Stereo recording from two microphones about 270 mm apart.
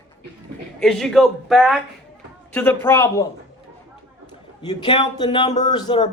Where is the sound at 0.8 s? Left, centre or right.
Centre.